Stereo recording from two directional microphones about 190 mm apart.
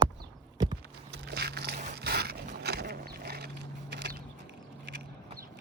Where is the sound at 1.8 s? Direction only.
60° right (ahead or behind).